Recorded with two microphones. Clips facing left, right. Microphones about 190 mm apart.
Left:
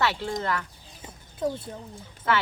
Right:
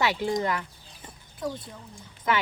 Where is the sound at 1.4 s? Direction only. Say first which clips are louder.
Left 4 dB; 30° left (ahead or behind).